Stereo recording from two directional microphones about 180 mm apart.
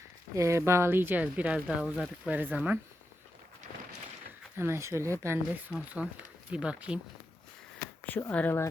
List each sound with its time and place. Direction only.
0.3 s speech: 15° right (ahead or behind)
4.5 s speech: 15° right (ahead or behind)
8.0 s speech: 10° left (ahead or behind)